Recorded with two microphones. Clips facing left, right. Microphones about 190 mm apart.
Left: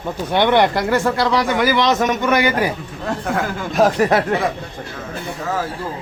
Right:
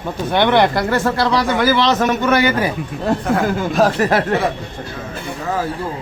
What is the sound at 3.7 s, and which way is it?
Speech, 15° left (ahead or behind).